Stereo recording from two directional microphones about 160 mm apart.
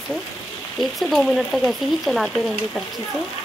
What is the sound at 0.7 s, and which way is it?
Frying, centre (ahead or behind).